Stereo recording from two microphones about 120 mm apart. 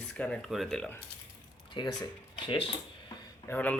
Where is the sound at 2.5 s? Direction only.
50° left (ahead or behind).